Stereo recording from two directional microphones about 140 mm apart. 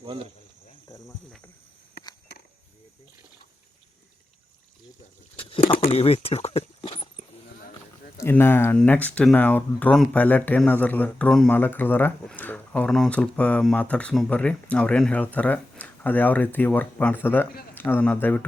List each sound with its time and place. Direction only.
0.0 s speech: 40° right (ahead or behind)
0.9 s cricket: 20° left (ahead or behind)
5.6 s a sound: 45° left (ahead or behind)
8.2 s speech: 15° left (ahead or behind)